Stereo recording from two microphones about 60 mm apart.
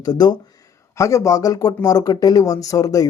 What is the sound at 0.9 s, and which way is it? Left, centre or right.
Speech, left.